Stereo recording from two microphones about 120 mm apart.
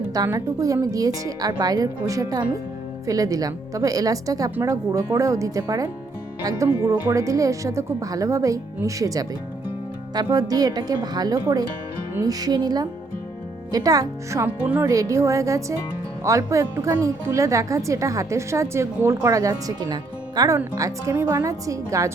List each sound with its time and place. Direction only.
0.3 s a woman's voice: 30° right (ahead or behind)
10.3 s speech: 30° right (ahead or behind)
14.4 s speech: 15° right (ahead or behind)
14.8 s a woman's voice: 25° right (ahead or behind)